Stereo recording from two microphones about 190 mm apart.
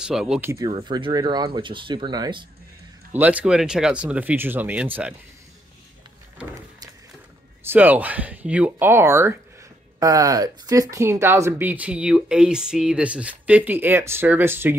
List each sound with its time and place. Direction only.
0.0 s speech: 5° right (ahead or behind)
0.5 s speech: 15° right (ahead or behind)
3.1 s speech: 10° right (ahead or behind)
7.6 s speech: 10° right (ahead or behind)